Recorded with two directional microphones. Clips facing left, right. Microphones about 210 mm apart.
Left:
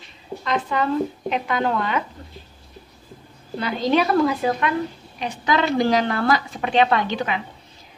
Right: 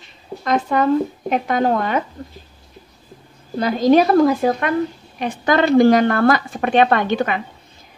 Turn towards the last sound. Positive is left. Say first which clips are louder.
# right 4 dB
turn(degrees=-50)  # may be behind; listen again after turning